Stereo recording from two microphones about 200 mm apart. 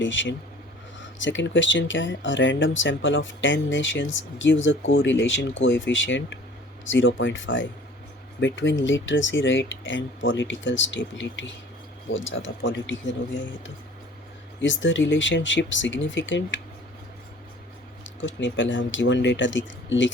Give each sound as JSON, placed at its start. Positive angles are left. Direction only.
{"t": 0.0, "sound": "speech", "side_deg": 65}
{"t": 14.6, "sound": "speech", "side_deg": 65}
{"t": 18.2, "sound": "speech", "side_deg": 65}